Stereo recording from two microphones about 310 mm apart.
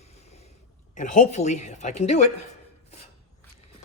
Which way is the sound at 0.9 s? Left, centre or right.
Left.